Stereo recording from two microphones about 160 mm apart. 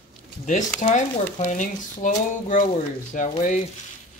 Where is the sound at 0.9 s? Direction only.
50° left (ahead or behind).